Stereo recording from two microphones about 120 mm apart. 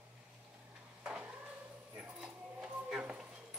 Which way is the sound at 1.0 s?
10° right (ahead or behind).